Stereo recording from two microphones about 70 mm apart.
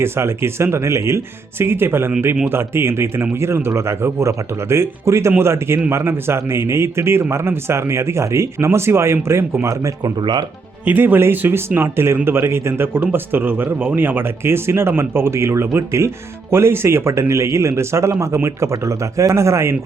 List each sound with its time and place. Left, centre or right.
0.0 s speech: right
10.0 s speech: right
10.8 s a man's voice: right